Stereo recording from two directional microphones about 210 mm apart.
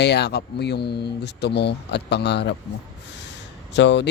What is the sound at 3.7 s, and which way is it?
Speech, 55° left (ahead or behind).